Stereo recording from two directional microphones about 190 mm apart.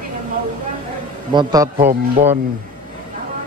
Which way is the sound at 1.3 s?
20° right (ahead or behind).